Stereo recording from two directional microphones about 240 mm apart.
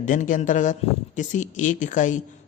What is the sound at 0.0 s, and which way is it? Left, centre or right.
A man's voice, left.